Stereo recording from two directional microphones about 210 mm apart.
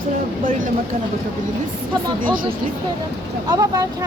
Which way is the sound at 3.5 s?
15° right (ahead or behind).